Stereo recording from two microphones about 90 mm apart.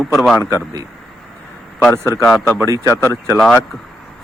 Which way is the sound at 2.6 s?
35° right (ahead or behind).